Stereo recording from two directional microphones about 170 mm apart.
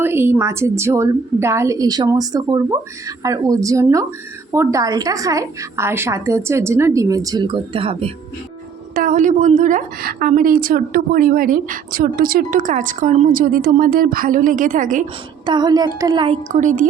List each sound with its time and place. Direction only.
0.0 s a woman's voice: 15° right (ahead or behind); by 8.1 s 35° right (ahead or behind)
9.0 s a woman's voice: 50° right (ahead or behind)
15.4 s a woman's voice: 25° right (ahead or behind)
16.5 s speech: 50° right (ahead or behind)